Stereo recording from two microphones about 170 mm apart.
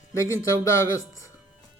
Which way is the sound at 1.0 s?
20° left (ahead or behind).